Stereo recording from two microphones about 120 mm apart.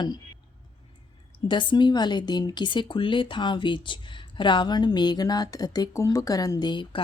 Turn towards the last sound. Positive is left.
turn(degrees=45)  # may be behind; listen again after turning